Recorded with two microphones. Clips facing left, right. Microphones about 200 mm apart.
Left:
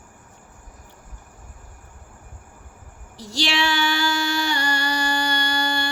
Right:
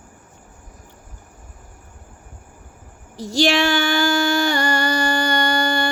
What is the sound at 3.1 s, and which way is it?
Music, 45° right (ahead or behind).